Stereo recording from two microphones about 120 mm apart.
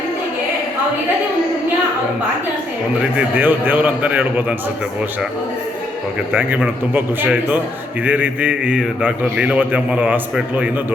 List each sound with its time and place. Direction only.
3.2 s a man's voice: 15° right (ahead or behind)
6.3 s a man's voice: 15° right (ahead or behind)